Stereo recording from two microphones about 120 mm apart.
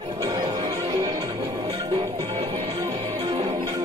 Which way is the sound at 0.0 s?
45° right (ahead or behind).